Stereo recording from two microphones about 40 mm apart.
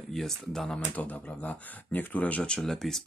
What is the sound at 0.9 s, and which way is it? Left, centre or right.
Speech, left.